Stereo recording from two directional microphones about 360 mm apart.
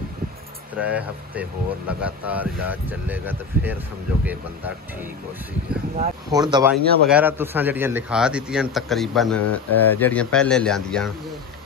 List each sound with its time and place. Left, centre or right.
0.7 s a man's voice: centre
6.3 s speech: centre
6.8 s a man's voice: right
7.1 s a man's voice: centre